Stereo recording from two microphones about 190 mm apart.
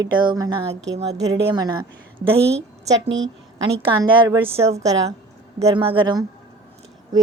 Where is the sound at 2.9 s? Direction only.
70° right (ahead or behind).